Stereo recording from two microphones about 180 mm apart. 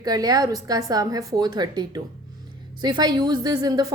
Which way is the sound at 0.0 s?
20° right (ahead or behind).